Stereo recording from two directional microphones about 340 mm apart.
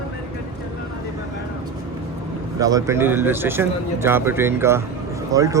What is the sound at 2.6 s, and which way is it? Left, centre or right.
Speech, centre.